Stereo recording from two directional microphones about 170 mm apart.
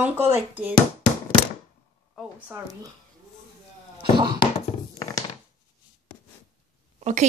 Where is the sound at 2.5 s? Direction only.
20° right (ahead or behind).